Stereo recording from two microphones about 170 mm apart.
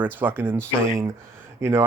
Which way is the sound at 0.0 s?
10° right (ahead or behind).